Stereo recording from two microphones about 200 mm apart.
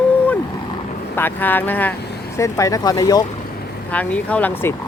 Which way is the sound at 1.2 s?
10° left (ahead or behind).